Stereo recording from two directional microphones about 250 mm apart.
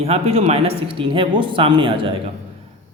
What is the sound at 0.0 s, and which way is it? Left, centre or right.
Speech, right.